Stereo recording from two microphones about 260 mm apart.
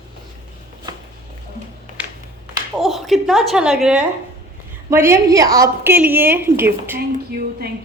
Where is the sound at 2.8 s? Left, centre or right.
Centre.